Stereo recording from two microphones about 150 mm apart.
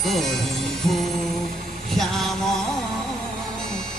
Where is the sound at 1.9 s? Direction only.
Centre (ahead or behind).